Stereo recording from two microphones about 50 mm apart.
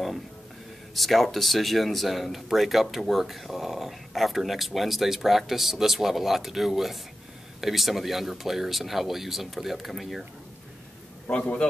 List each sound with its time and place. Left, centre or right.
0.9 s speech: centre
11.2 s a man's voice: left